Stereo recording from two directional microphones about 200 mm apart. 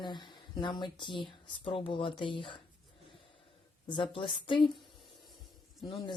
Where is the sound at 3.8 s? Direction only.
25° left (ahead or behind).